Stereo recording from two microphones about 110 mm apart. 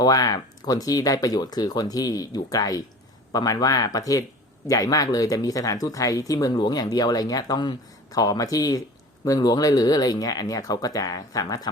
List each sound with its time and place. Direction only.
0.0 s speech: 35° left (ahead or behind)